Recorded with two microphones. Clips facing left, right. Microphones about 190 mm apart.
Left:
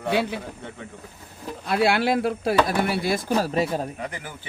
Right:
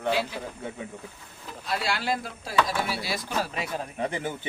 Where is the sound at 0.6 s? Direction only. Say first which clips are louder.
Right 2 dB; 10° right (ahead or behind).